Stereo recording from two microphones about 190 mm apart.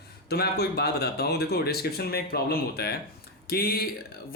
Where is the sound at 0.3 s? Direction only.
55° left (ahead or behind).